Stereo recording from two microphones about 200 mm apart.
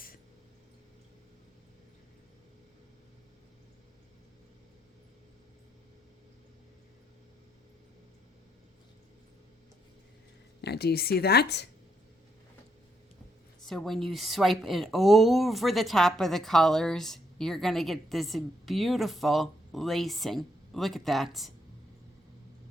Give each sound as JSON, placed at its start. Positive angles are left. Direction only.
{"t": 10.6, "sound": "speech", "side_deg": 55}
{"t": 13.7, "sound": "speech", "side_deg": 0}